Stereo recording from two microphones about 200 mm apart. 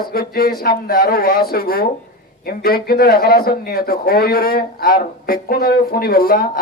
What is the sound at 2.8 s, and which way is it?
Speech, 50° left (ahead or behind).